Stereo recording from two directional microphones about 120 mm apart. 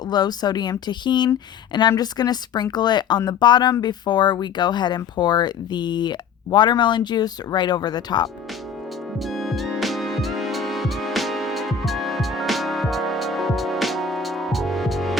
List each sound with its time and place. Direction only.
0.1 s speech: 35° left (ahead or behind)
9.1 s music: centre (ahead or behind)